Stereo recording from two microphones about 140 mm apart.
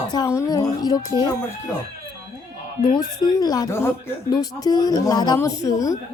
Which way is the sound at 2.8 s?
30° left (ahead or behind).